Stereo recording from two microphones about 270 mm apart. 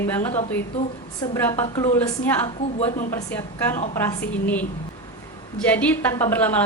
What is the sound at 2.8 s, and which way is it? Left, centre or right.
Speech, left.